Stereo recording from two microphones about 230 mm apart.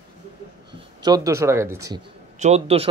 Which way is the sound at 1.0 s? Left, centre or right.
Centre.